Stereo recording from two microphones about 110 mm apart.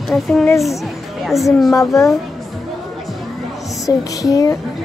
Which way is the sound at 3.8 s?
30° left (ahead or behind).